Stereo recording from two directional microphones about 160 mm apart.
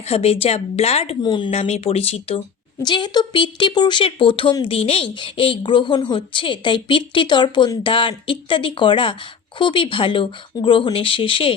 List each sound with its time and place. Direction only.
0.1 s a woman's voice: 40° left (ahead or behind)
1.5 s a woman's voice: 40° left (ahead or behind)
2.8 s a woman's voice: 30° left (ahead or behind)